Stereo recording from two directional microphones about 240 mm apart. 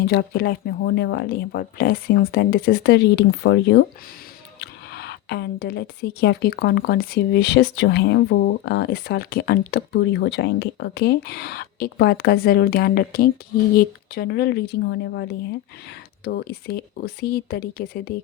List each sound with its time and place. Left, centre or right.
0.1 s speech: left